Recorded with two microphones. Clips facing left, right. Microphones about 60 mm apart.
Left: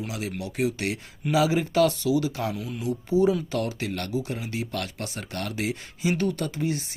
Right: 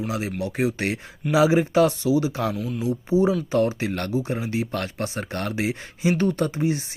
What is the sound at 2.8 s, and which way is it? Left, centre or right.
Speech, right.